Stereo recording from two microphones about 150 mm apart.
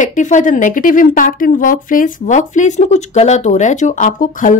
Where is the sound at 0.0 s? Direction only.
55° left (ahead or behind).